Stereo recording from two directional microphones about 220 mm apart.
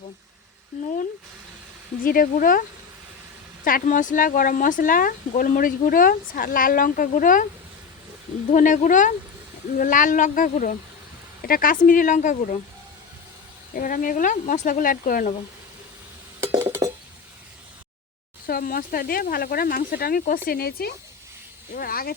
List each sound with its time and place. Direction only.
2.0 s speech: 40° left (ahead or behind)
8.5 s speech: 35° left (ahead or behind)
13.7 s speech: 40° left (ahead or behind)
16.4 s a sound: 10° right (ahead or behind)
18.4 s speech: 40° left (ahead or behind)